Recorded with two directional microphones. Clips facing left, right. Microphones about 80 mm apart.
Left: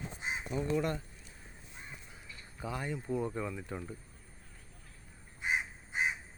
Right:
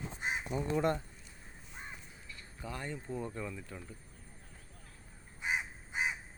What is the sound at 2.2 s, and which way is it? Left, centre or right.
Speech, centre.